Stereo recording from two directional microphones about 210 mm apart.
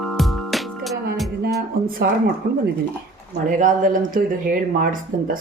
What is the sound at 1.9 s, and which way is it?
Speech, 45° right (ahead or behind).